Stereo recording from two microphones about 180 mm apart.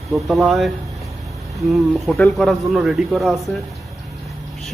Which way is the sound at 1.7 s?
5° left (ahead or behind).